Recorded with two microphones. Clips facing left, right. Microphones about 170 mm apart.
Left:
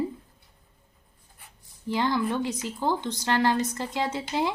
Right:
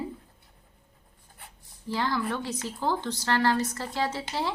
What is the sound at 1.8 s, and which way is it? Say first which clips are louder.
Speech: left 3 dB; 20° left (ahead or behind).